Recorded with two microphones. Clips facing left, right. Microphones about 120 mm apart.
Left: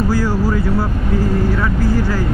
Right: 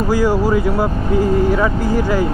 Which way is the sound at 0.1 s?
15° right (ahead or behind).